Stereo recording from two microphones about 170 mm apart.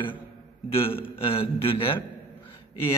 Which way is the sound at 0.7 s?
30° left (ahead or behind).